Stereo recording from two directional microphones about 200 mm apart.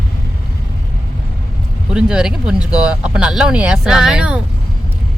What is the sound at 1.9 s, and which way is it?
Speech, 5° right (ahead or behind).